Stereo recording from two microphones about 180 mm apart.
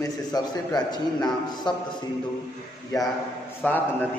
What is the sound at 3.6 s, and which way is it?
Speech, 10° left (ahead or behind).